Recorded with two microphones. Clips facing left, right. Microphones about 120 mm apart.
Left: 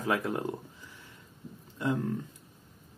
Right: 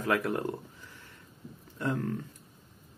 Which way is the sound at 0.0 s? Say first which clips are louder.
Right 1 dB; 20° left (ahead or behind).